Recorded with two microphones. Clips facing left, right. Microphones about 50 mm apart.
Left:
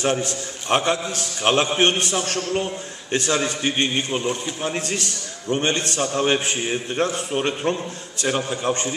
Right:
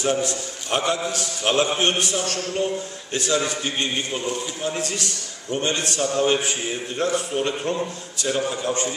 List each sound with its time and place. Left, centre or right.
0.0 s a man's voice: left